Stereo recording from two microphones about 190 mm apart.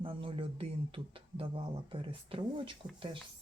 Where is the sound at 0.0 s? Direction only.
30° right (ahead or behind).